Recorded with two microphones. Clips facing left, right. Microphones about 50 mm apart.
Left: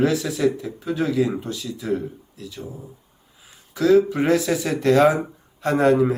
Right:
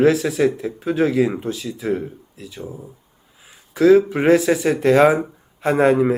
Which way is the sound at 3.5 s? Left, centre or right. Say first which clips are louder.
Right 5 dB; right.